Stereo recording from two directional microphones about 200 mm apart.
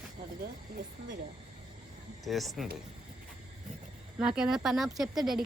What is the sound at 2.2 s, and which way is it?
Speech, centre (ahead or behind).